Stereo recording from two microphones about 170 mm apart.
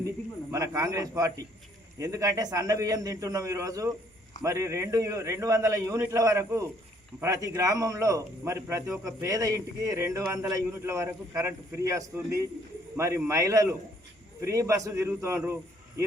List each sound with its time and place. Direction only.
0.5 s a man's voice: 20° right (ahead or behind)